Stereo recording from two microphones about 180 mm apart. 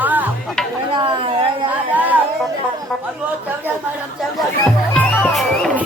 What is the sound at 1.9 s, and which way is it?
Speech, 10° right (ahead or behind).